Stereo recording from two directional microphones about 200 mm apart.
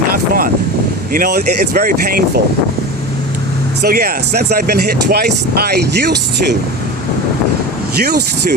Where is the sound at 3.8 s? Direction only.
50° right (ahead or behind).